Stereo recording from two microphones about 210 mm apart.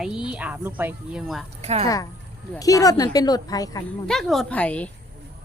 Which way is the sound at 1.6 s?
30° right (ahead or behind).